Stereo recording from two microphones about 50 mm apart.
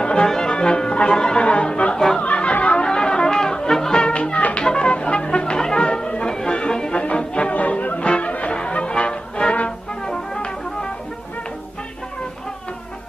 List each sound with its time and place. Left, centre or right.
0.0 s music: centre
1.4 s a sound: left
2.2 s music: left